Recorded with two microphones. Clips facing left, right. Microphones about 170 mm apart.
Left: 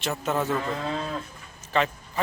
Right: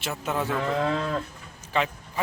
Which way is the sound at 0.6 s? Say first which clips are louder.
Right 4 dB; 70° right (ahead or behind).